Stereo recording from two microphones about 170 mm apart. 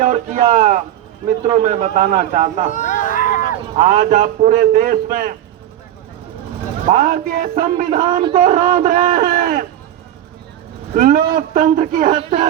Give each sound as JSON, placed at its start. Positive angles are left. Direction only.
{"t": 0.0, "sound": "a man's voice", "side_deg": -45}
{"t": 2.7, "sound": "a sound", "side_deg": 50}
{"t": 3.8, "sound": "a man's voice", "side_deg": -45}
{"t": 6.8, "sound": "a man's voice", "side_deg": -45}
{"t": 10.9, "sound": "a man's voice", "side_deg": -50}